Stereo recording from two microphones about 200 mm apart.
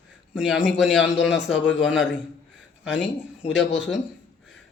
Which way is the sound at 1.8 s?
Centre (ahead or behind).